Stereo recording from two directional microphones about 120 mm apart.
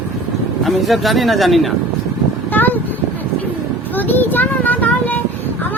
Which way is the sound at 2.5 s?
15° left (ahead or behind).